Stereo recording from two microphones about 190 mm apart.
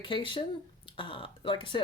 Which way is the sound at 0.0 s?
25° left (ahead or behind).